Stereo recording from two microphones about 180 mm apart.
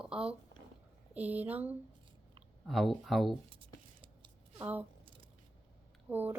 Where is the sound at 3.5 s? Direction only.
30° right (ahead or behind).